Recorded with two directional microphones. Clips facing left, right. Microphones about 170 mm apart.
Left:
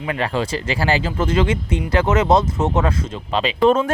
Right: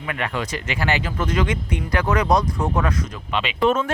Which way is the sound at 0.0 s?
30° left (ahead or behind).